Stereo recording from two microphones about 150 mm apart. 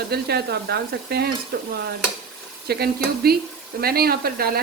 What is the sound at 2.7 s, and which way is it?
Speech, 90° right.